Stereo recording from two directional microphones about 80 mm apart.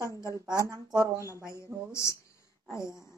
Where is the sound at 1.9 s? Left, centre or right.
Left.